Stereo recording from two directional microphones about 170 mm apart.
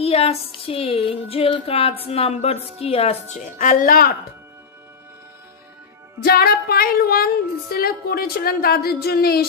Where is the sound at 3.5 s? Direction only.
55° left (ahead or behind).